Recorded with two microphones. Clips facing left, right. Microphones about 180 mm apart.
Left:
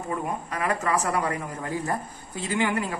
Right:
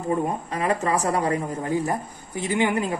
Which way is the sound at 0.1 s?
25° right (ahead or behind).